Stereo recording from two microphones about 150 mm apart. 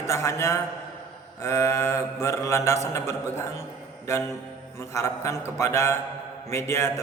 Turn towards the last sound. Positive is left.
turn(degrees=15)  # may be behind; listen again after turning